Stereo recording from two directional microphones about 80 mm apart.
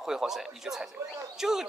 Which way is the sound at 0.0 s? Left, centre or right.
Centre.